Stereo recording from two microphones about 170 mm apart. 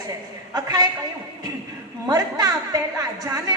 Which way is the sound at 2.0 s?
20° right (ahead or behind).